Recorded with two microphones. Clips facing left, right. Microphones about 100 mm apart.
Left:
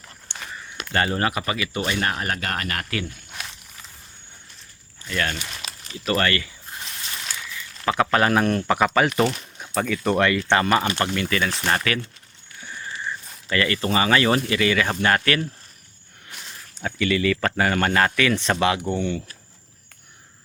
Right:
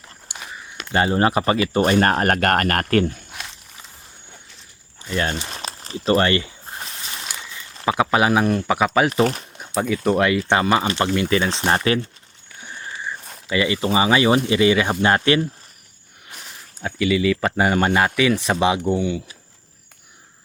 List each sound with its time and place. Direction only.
0.3 s a sound: 10° right (ahead or behind)
0.9 s speech: 20° right (ahead or behind); by 3.1 s 50° right (ahead or behind)
5.0 s speech: 25° right (ahead or behind)
7.2 s a sound: 25° right (ahead or behind)
7.9 s speech: 15° right (ahead or behind)
9.2 s speech: 50° right (ahead or behind)
9.6 s speech: 10° right (ahead or behind); by 11.9 s 25° right (ahead or behind)
13.0 s speech: 15° right (ahead or behind)
16.8 s speech: 10° right (ahead or behind)